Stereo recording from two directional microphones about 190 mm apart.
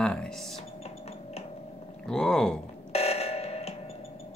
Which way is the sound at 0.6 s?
35° left (ahead or behind).